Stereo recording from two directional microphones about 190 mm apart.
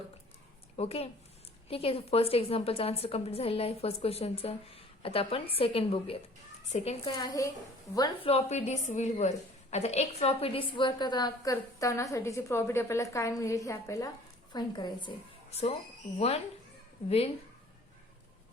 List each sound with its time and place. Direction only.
0.8 s a woman's voice: 30° left (ahead or behind)
7.2 s a woman's voice: 20° left (ahead or behind)
8.3 s a woman's voice: 35° left (ahead or behind)
16.1 s a woman's voice: 35° left (ahead or behind)